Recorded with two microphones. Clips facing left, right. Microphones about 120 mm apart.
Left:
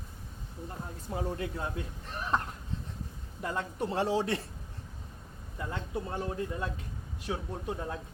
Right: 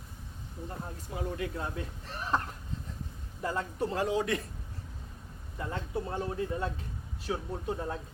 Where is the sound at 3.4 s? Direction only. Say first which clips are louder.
Right 1 dB; 35° right (ahead or behind).